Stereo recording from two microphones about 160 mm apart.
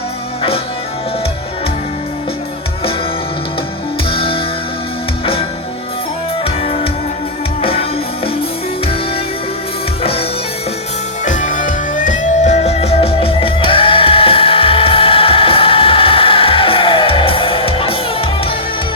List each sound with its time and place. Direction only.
4.1 s music: 35° left (ahead or behind)
10.0 s music: 35° left (ahead or behind)
11.3 s music: 50° left (ahead or behind); by 18.5 s 35° left (ahead or behind)